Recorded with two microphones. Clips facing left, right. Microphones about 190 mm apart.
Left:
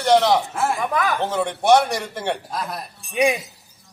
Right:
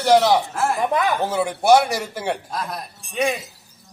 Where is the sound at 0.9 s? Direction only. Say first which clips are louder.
Right 2 dB; 25° right (ahead or behind).